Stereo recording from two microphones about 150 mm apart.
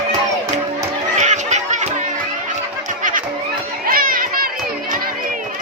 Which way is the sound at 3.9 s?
75° right (ahead or behind).